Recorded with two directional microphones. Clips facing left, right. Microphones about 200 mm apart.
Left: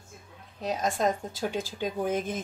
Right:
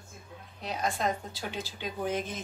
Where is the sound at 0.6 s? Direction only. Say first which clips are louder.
Left 4 dB; 45° left (ahead or behind).